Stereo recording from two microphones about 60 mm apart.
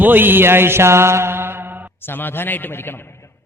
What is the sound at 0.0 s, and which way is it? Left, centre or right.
Mantra, right.